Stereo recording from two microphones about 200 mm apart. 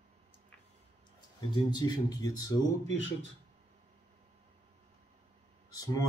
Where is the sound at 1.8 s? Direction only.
20° left (ahead or behind).